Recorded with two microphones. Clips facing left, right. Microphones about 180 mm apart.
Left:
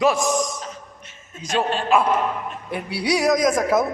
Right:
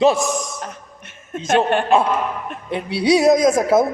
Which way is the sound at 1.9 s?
25° right (ahead or behind).